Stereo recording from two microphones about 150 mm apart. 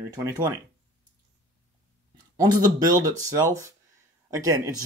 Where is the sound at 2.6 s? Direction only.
25° right (ahead or behind).